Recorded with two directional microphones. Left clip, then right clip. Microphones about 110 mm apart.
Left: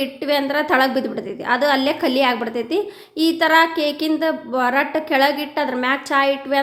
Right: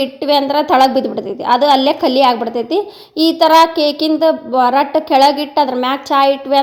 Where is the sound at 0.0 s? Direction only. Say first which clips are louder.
Right 6 dB; 30° right (ahead or behind).